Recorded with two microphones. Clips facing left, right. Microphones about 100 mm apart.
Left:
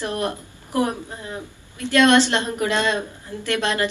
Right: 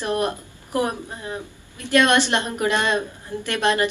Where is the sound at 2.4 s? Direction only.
20° right (ahead or behind).